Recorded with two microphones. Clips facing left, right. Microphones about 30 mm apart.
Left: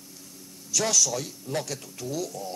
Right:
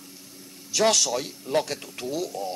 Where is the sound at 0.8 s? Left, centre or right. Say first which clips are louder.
Right 4 dB; right.